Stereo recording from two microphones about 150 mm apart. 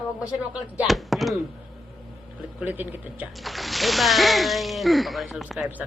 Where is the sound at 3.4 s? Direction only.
Centre (ahead or behind).